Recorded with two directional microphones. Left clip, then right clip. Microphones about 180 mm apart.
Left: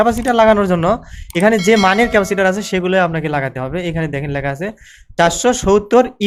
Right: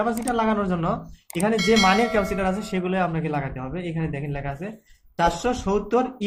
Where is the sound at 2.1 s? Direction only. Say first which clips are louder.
Left 10 dB; 55° left (ahead or behind).